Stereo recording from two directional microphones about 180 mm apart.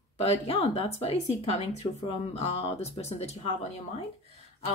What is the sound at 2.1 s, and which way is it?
Speech, 35° left (ahead or behind).